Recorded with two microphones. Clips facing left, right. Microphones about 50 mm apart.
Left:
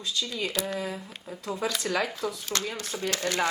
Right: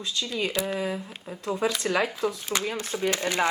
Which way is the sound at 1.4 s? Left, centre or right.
Right.